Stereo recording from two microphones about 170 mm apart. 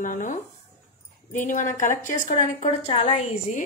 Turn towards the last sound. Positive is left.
turn(degrees=40)  # may be behind; listen again after turning